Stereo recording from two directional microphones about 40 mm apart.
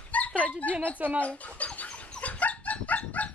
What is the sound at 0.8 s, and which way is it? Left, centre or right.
Speech, right.